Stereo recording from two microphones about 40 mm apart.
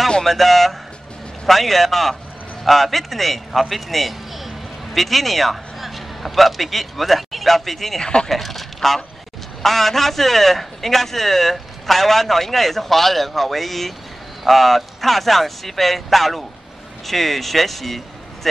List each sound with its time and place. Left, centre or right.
0.2 s a man's voice: centre
8.0 s speech: left
8.3 s a man's voice: centre